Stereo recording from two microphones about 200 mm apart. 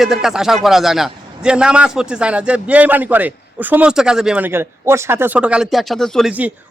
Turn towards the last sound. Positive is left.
turn(degrees=-5)  # may be behind; listen again after turning